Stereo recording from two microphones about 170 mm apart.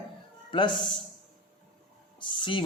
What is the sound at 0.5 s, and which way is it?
Speech, 30° left (ahead or behind).